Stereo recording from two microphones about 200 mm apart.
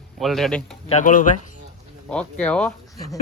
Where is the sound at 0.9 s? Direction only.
40° left (ahead or behind).